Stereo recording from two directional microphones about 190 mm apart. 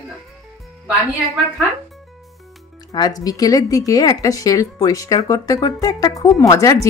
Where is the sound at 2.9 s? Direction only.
20° left (ahead or behind).